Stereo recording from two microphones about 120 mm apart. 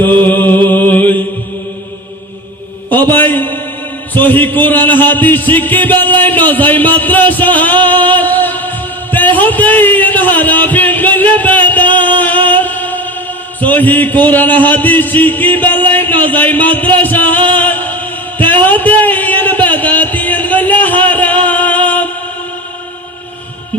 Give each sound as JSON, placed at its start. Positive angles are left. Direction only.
{"t": 0.0, "sound": "mantra", "side_deg": 15}
{"t": 2.9, "sound": "a man's voice", "side_deg": 15}
{"t": 4.1, "sound": "music", "side_deg": 15}
{"t": 12.2, "sound": "chant", "side_deg": 15}